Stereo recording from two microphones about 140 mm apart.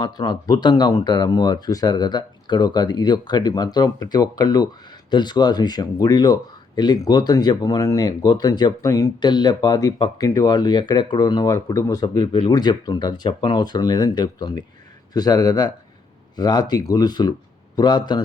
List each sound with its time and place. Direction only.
0.0 s speech: 30° left (ahead or behind)
12.0 s speech: 35° left (ahead or behind)
12.5 s speech: 30° left (ahead or behind)